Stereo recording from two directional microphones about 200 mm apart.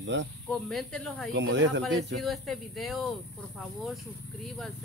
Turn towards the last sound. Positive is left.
turn(degrees=0)  # may be behind; listen again after turning